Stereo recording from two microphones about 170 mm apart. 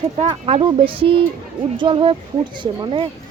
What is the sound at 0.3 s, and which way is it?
Speech, 30° right (ahead or behind).